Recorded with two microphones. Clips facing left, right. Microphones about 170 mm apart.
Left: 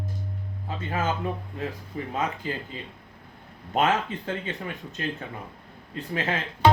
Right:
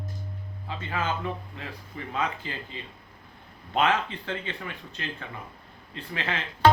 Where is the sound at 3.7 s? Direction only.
45° left (ahead or behind).